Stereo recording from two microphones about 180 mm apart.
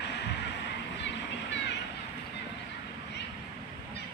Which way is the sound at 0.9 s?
80° left.